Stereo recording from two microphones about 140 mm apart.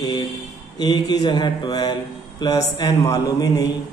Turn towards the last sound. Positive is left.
turn(degrees=25)  # may be behind; listen again after turning